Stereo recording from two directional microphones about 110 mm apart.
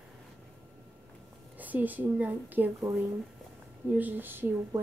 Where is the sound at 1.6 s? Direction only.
15° right (ahead or behind).